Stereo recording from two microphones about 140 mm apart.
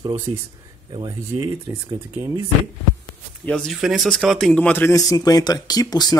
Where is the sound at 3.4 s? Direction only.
5° left (ahead or behind); by 6.2 s 25° left (ahead or behind).